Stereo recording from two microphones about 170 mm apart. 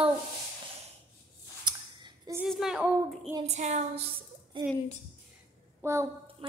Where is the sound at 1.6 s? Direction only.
25° right (ahead or behind).